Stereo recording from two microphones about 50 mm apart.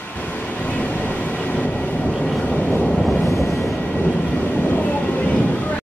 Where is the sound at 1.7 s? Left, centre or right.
Centre.